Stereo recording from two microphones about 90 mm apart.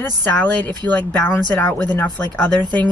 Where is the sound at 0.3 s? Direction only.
20° left (ahead or behind).